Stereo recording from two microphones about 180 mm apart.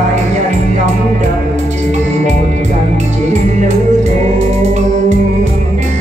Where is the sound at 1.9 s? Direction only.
40° right (ahead or behind).